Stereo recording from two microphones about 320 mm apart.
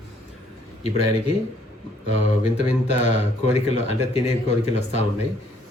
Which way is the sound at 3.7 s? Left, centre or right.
Centre.